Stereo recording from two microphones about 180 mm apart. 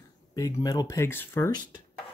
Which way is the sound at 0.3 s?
20° left (ahead or behind).